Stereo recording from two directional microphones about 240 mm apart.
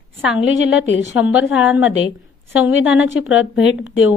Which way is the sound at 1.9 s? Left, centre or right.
Left.